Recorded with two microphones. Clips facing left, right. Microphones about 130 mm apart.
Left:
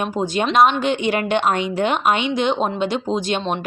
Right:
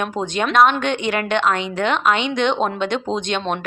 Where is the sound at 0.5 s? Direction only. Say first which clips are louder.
Even; 5° left (ahead or behind).